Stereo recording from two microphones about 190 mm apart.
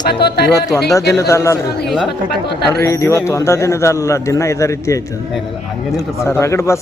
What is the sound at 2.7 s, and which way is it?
A man's voice, 15° left (ahead or behind).